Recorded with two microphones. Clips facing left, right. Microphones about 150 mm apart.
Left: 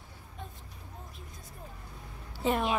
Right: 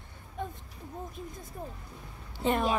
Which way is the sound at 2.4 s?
5° left (ahead or behind).